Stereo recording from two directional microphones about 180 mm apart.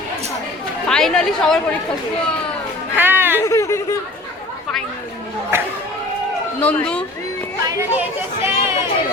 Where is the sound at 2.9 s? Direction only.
10° right (ahead or behind).